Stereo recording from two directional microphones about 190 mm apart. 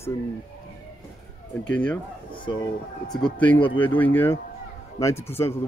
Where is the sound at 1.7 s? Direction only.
5° left (ahead or behind).